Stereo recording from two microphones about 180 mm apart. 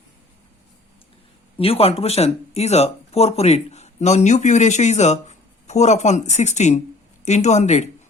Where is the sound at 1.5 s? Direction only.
30° left (ahead or behind).